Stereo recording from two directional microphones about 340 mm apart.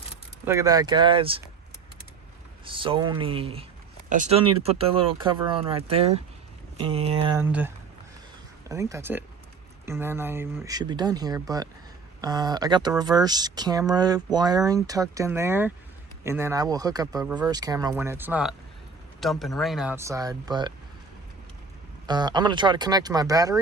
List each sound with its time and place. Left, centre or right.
0.4 s speech: centre
2.6 s speech: centre
8.7 s speech: centre
22.0 s speech: centre